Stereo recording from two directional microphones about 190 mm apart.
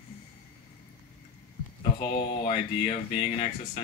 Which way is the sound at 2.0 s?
25° left (ahead or behind).